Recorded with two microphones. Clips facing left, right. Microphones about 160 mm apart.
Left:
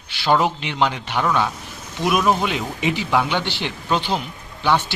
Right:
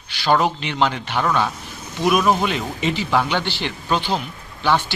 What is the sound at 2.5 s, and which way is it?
Speech, 15° left (ahead or behind).